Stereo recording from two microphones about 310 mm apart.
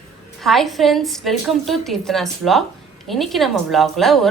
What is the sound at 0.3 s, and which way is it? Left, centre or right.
A woman's voice, centre.